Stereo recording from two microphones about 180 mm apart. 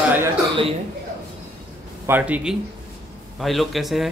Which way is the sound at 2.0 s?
10° right (ahead or behind).